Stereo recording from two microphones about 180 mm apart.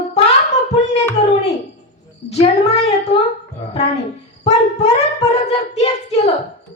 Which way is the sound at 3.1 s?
65° left (ahead or behind).